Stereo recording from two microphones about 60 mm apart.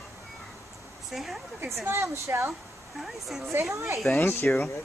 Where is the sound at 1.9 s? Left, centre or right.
Right.